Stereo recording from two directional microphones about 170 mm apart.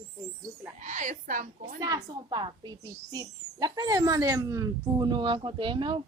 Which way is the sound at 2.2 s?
25° right (ahead or behind).